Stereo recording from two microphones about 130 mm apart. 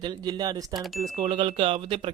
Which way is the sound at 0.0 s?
30° right (ahead or behind).